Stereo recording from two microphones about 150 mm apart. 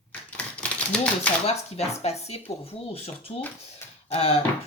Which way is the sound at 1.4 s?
45° left (ahead or behind).